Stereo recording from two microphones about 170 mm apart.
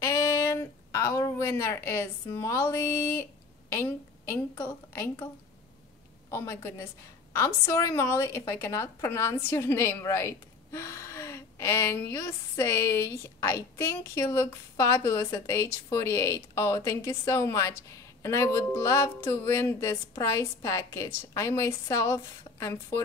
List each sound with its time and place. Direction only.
0.0 s a woman's voice: 15° left (ahead or behind)
7.3 s a woman's voice: 15° left (ahead or behind)